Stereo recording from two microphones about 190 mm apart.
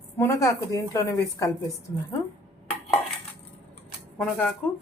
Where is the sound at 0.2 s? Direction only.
15° left (ahead or behind).